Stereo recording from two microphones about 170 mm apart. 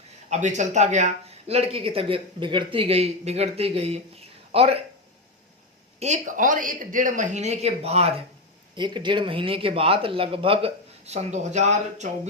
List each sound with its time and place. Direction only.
0.3 s speech: 45° right (ahead or behind)
6.0 s speech: 45° right (ahead or behind)
8.7 s speech: 25° right (ahead or behind); by 12.0 s 40° right (ahead or behind)